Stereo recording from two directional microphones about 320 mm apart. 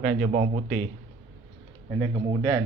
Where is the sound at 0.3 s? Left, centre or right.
Right.